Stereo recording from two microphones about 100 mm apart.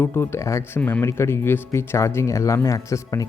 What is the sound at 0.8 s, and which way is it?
Speech, 15° left (ahead or behind).